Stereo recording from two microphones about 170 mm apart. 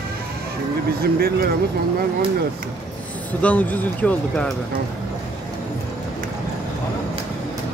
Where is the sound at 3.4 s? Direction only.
10° left (ahead or behind).